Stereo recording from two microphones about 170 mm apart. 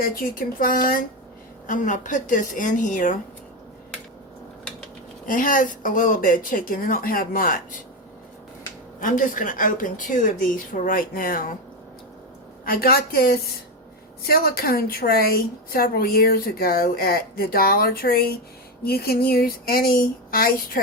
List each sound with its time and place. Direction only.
0.0 s a woman's voice: 55° left (ahead or behind)
5.2 s a woman's voice: 50° left (ahead or behind)
9.0 s a woman's voice: 50° left (ahead or behind)
12.6 s a woman's voice: 60° left (ahead or behind)